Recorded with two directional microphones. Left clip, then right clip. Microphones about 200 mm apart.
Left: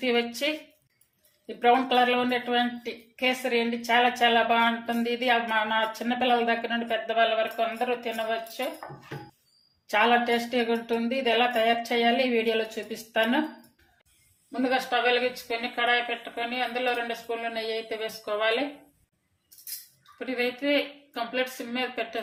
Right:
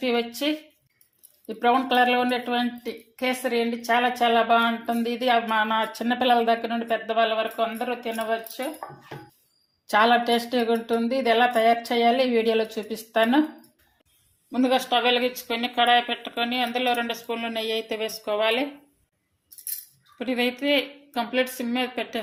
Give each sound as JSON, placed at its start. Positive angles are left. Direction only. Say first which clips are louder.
{"t": 1.5, "sound": "speech", "louder": "right 1 dB", "side_deg": -25}
{"t": 9.9, "sound": "speech", "louder": "right 3 dB", "side_deg": -35}
{"t": 14.5, "sound": "speech", "louder": "right 4 dB", "side_deg": -35}
{"t": 20.1, "sound": "speech", "louder": "right 3 dB", "side_deg": -35}